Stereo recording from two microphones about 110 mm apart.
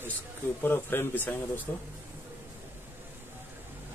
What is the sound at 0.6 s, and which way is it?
Speech, 20° left (ahead or behind).